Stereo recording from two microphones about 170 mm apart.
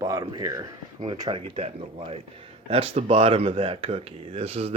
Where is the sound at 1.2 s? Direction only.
30° right (ahead or behind).